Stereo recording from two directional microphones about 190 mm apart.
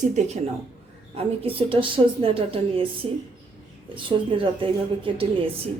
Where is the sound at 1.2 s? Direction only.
30° right (ahead or behind).